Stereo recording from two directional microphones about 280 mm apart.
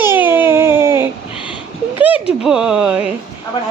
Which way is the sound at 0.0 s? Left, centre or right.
Centre.